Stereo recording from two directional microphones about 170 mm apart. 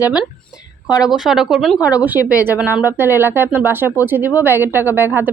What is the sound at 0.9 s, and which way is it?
Speech, 20° left (ahead or behind).